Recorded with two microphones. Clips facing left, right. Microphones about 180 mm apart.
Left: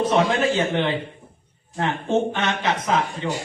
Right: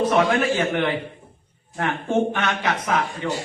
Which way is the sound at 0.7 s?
20° left (ahead or behind).